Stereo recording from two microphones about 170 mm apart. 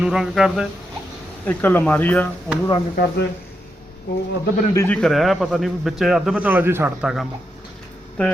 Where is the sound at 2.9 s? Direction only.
65° left (ahead or behind).